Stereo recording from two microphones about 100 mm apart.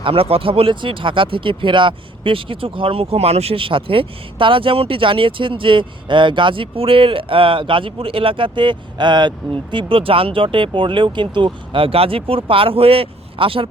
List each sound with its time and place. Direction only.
0.0 s speech: 70° right (ahead or behind)